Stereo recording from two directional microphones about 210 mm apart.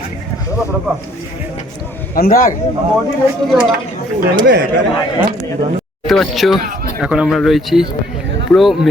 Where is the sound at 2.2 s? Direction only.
45° left (ahead or behind).